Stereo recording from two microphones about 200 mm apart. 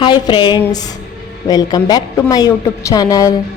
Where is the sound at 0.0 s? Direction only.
25° left (ahead or behind).